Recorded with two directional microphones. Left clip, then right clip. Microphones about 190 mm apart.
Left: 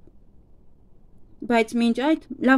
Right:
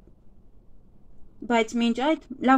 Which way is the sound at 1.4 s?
30° left (ahead or behind).